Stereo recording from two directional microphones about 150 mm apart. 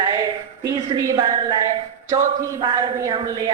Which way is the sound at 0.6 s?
25° right (ahead or behind).